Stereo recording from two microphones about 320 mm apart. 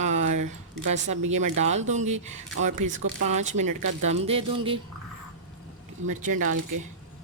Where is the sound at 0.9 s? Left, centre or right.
Right.